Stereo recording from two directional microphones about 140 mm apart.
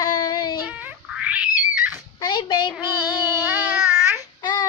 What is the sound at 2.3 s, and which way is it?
Speech, 35° left (ahead or behind).